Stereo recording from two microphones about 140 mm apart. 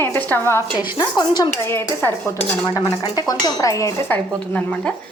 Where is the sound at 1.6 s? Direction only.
15° left (ahead or behind).